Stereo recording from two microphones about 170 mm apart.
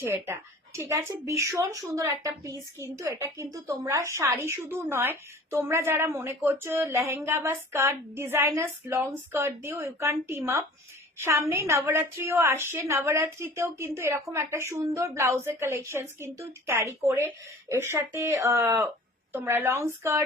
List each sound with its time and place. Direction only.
0.0 s a woman's voice: 15° right (ahead or behind)